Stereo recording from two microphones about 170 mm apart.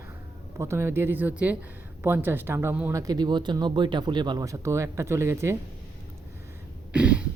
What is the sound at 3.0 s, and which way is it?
Speech, 25° right (ahead or behind).